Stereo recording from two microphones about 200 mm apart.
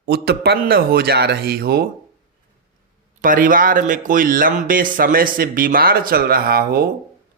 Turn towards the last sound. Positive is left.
turn(degrees=-50)  # may be behind; listen again after turning